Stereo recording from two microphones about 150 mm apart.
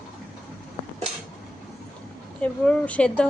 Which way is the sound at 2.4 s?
10° left (ahead or behind).